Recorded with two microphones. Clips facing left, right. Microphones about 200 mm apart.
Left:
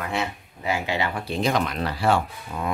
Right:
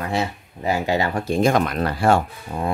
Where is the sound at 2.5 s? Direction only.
30° right (ahead or behind).